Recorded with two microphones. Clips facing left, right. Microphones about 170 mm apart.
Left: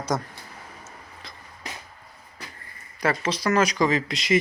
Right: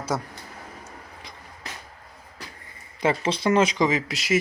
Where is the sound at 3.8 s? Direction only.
10° right (ahead or behind).